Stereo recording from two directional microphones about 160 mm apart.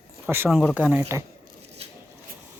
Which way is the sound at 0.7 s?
10° right (ahead or behind).